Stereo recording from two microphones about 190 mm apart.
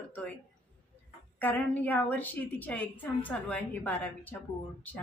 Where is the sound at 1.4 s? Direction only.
10° left (ahead or behind).